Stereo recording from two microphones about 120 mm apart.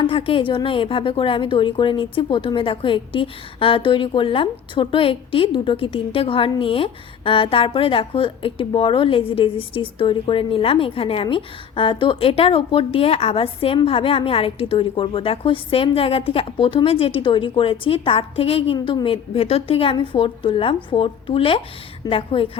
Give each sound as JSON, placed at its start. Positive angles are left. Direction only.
{"t": 0.1, "sound": "a woman's voice", "side_deg": 50}